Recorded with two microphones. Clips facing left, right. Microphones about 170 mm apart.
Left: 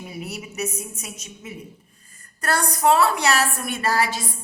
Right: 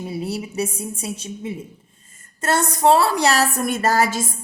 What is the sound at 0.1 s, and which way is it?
A woman's voice, 30° right (ahead or behind).